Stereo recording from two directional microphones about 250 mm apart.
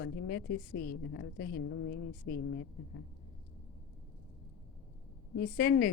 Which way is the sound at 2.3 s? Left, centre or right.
Left.